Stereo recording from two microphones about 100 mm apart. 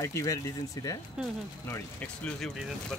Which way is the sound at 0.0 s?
30° left (ahead or behind).